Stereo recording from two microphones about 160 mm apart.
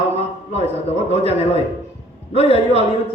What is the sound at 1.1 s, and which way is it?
A man's voice, 40° left (ahead or behind).